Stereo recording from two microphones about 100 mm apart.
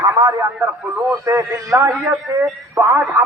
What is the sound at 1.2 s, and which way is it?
A man's voice, 30° right (ahead or behind).